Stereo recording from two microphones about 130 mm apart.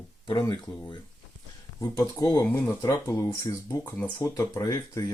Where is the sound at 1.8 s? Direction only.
25° left (ahead or behind).